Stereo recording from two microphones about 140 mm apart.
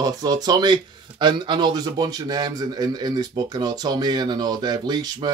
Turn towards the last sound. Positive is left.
turn(degrees=-30)  # may be behind; listen again after turning